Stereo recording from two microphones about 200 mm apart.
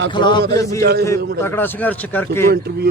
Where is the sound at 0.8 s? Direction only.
50° right (ahead or behind).